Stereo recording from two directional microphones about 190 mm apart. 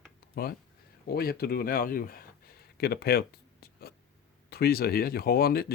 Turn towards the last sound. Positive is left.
turn(degrees=55)  # may be behind; listen again after turning